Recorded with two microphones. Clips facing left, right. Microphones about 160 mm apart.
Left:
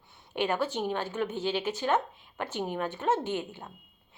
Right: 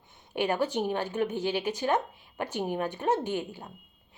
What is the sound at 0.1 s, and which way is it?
A woman's voice, 15° right (ahead or behind).